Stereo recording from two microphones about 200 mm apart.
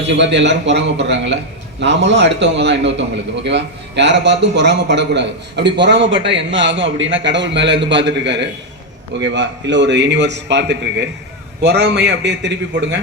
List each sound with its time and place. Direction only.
0.1 s a man's voice: 60° right (ahead or behind)